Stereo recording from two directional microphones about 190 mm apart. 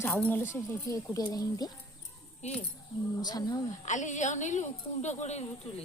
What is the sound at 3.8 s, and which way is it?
A woman's voice, 40° left (ahead or behind).